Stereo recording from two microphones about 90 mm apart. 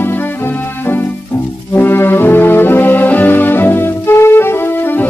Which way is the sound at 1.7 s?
25° left (ahead or behind).